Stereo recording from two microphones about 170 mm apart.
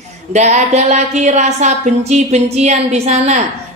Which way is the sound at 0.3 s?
40° right (ahead or behind).